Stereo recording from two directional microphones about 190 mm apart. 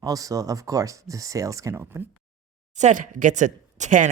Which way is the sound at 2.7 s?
40° right (ahead or behind).